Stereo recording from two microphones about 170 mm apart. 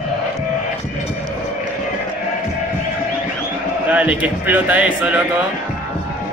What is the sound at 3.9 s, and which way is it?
A man's voice, 10° right (ahead or behind).